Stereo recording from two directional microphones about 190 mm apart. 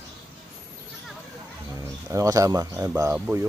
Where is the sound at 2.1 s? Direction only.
15° right (ahead or behind).